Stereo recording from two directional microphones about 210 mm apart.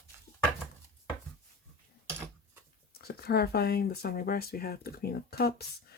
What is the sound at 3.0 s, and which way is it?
Speech, 50° left (ahead or behind).